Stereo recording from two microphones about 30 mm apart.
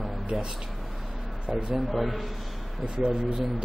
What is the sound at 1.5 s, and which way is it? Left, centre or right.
Speech, centre.